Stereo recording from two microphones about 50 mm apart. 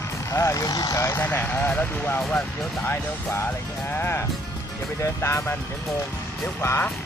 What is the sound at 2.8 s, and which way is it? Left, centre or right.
Speech, left.